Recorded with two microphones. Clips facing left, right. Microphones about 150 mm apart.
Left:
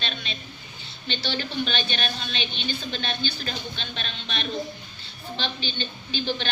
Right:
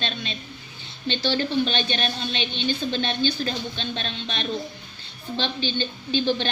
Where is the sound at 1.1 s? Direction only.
30° right (ahead or behind).